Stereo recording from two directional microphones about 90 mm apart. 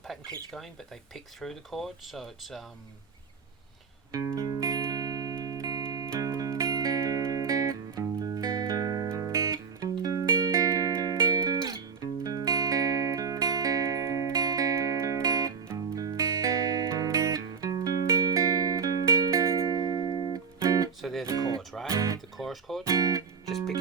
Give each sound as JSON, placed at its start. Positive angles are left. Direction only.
{"t": 0.1, "sound": "speech", "side_deg": 0}
{"t": 4.3, "sound": "music", "side_deg": -40}
{"t": 20.6, "sound": "music", "side_deg": -40}
{"t": 21.0, "sound": "music", "side_deg": 0}
{"t": 21.2, "sound": "music", "side_deg": -40}
{"t": 22.4, "sound": "music", "side_deg": 0}
{"t": 22.9, "sound": "music", "side_deg": -40}